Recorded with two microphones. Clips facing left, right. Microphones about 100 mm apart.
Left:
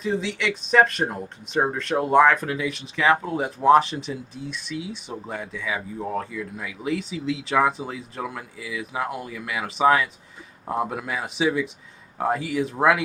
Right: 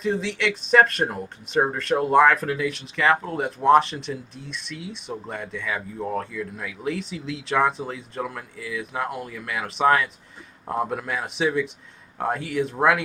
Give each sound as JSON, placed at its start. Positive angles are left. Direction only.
{"t": 0.0, "sound": "speech", "side_deg": 0}